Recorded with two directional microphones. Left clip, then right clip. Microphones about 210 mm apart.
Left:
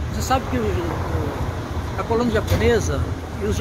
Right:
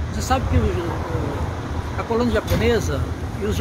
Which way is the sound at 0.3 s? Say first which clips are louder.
Left 1 dB; 40° right (ahead or behind).